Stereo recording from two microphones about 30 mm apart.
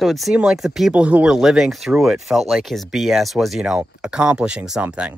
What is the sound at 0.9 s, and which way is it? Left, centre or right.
Speech, right.